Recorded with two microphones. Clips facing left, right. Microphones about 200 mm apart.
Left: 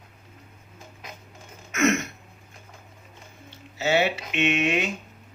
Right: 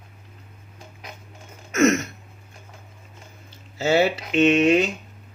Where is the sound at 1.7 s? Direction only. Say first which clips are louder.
Right 4 dB; 40° right (ahead or behind).